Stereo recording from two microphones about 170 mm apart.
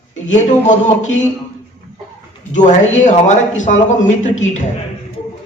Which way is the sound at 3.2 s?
45° left (ahead or behind).